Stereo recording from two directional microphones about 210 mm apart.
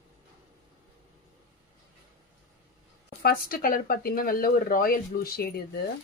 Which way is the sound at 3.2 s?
45° left (ahead or behind).